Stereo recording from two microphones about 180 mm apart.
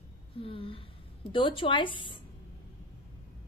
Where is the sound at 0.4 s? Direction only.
30° left (ahead or behind).